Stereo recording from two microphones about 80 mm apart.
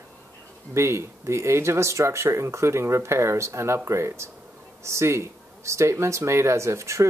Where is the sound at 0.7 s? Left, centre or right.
Right.